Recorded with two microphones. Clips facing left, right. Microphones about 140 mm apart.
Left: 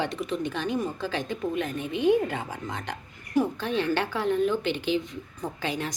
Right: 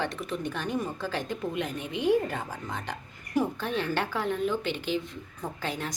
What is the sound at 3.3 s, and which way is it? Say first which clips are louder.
A woman's voice: left 3 dB; centre (ahead or behind).